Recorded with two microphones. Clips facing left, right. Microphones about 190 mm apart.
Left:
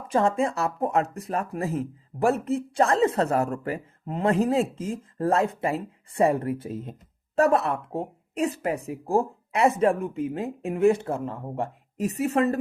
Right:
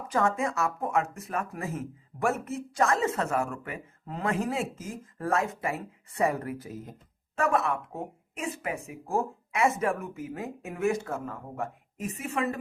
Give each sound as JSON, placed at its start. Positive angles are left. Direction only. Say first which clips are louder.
{"t": 0.1, "sound": "speech", "louder": "left 4 dB", "side_deg": 30}
{"t": 4.0, "sound": "speech", "louder": "left 7 dB", "side_deg": 25}